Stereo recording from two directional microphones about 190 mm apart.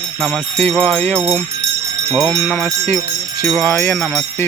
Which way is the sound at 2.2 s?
15° left (ahead or behind).